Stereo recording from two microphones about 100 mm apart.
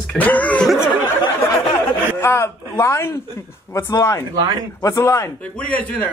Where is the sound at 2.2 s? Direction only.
25° left (ahead or behind).